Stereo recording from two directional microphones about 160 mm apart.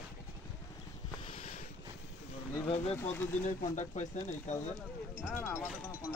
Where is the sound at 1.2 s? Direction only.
35° left (ahead or behind).